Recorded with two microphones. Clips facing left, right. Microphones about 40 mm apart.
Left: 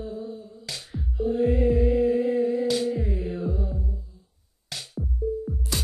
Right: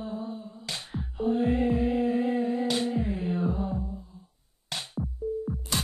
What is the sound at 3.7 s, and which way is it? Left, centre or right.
Mantra, right.